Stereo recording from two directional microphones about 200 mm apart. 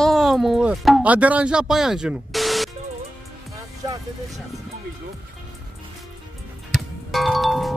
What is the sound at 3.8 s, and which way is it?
Music, 20° right (ahead or behind).